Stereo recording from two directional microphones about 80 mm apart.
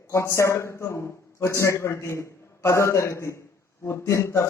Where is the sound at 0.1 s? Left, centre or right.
Left.